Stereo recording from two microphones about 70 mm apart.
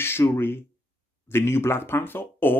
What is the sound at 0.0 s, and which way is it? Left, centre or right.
Speech, left.